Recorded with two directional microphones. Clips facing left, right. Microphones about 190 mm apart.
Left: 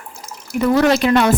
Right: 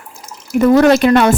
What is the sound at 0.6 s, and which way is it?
Speech, 50° right (ahead or behind).